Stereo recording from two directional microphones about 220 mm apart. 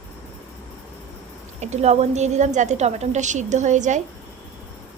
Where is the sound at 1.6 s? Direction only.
30° right (ahead or behind).